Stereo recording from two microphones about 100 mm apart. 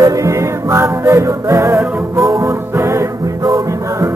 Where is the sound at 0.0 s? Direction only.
35° right (ahead or behind).